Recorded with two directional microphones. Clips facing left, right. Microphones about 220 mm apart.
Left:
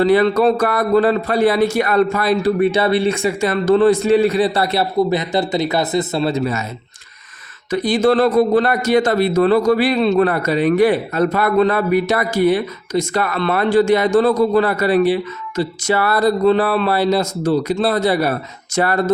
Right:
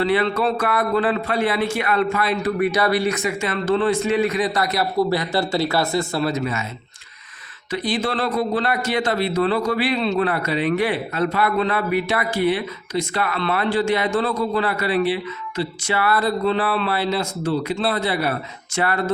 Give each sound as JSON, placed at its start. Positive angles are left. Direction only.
{"t": 0.0, "sound": "speech", "side_deg": 40}
{"t": 7.7, "sound": "a man's voice", "side_deg": 45}